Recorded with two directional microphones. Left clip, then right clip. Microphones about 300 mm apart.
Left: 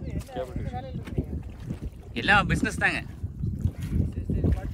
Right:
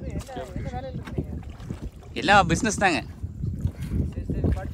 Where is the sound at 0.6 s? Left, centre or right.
Centre.